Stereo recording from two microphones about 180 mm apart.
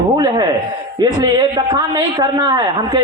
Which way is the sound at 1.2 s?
25° right (ahead or behind).